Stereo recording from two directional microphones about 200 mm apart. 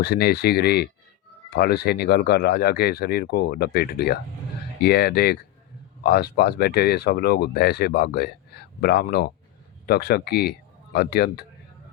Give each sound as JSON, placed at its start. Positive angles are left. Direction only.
{"t": 0.0, "sound": "speech", "side_deg": 50}